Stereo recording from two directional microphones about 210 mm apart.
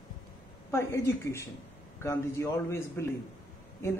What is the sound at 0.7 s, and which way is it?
Speech, 15° left (ahead or behind).